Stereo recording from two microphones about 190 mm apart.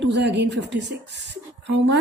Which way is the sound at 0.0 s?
65° right (ahead or behind).